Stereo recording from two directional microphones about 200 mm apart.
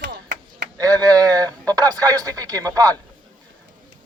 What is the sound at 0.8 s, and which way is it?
A man's voice, 20° right (ahead or behind).